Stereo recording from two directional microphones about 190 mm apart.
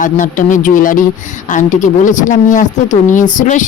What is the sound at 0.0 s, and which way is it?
A woman's voice, 45° left (ahead or behind).